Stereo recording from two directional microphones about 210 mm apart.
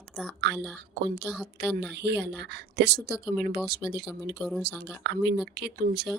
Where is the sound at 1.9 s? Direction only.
55° right (ahead or behind).